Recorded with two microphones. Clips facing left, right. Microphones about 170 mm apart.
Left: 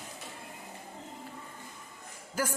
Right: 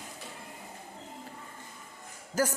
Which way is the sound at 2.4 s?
40° right (ahead or behind).